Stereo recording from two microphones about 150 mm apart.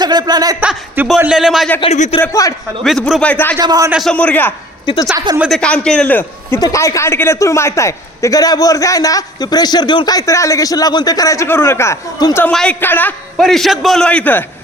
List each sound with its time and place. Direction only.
0.0 s speech: 25° right (ahead or behind)
0.6 s a man's voice: 5° right (ahead or behind)
1.8 s speech: 45° left (ahead or behind)
2.3 s a man's voice: 20° left (ahead or behind)
2.8 s a man's voice: centre (ahead or behind)
3.6 s speech: 25° right (ahead or behind)
3.9 s a man's voice: 5° left (ahead or behind)
5.1 s speech: 25° right (ahead or behind)
5.4 s a man's voice: 5° left (ahead or behind)
12.5 s a man's voice: 5° left (ahead or behind)
13.4 s a man's voice: centre (ahead or behind)